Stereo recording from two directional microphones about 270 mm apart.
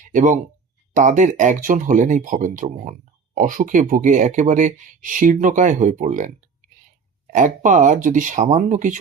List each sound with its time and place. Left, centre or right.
0.0 s speech: right
7.3 s speech: right